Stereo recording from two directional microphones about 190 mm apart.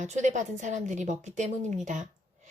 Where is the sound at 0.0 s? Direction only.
40° right (ahead or behind).